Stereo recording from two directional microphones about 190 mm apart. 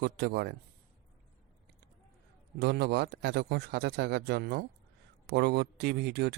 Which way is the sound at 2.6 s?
60° right (ahead or behind).